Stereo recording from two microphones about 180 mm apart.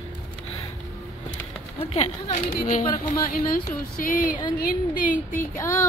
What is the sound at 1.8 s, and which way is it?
A woman's voice, 35° left (ahead or behind).